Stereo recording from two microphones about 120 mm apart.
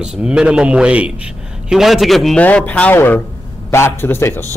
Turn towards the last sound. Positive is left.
turn(degrees=20)  # may be behind; listen again after turning